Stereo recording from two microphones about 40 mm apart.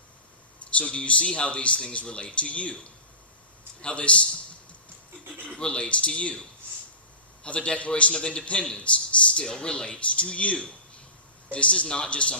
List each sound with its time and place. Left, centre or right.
0.6 s speech: left
3.8 s a man's voice: left
5.5 s a man's voice: left
7.4 s a man's voice: left